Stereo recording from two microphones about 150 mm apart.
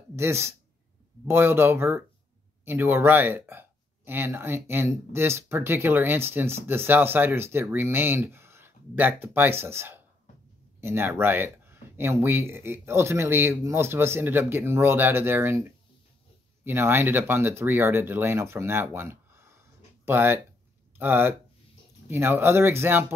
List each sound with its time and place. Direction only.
0.1 s speech: 15° right (ahead or behind)